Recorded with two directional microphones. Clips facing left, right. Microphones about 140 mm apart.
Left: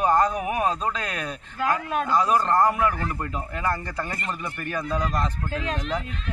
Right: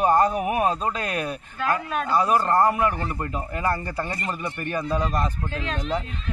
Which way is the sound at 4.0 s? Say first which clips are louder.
Right 2 dB; 20° right (ahead or behind).